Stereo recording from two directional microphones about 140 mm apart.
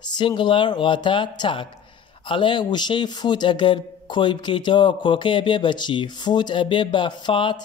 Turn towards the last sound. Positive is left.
turn(degrees=35)  # may be behind; listen again after turning